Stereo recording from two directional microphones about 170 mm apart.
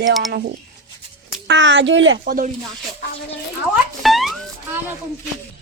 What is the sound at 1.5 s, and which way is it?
Speech, 90° right.